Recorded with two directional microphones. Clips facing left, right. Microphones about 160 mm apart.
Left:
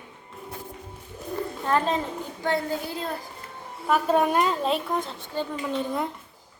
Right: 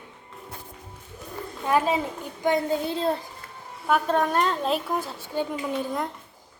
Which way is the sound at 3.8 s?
5° left (ahead or behind).